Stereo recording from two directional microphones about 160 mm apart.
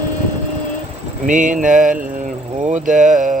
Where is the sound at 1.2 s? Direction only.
50° right (ahead or behind).